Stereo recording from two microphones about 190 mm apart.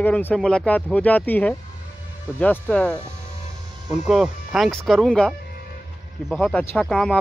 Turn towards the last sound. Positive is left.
turn(degrees=5)  # may be behind; listen again after turning